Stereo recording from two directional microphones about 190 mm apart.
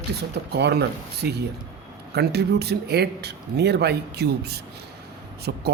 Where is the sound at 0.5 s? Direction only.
60° right (ahead or behind).